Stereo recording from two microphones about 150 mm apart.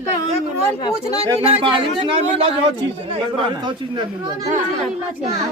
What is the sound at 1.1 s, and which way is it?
Speech, 40° right (ahead or behind).